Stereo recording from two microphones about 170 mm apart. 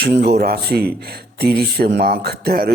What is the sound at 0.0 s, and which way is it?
Speech, 70° right (ahead or behind).